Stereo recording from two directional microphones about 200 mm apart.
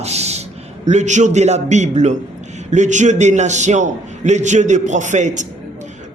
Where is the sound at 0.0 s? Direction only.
30° right (ahead or behind).